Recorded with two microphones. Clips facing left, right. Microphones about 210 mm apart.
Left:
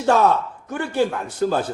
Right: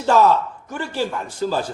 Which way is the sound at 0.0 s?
60° left (ahead or behind).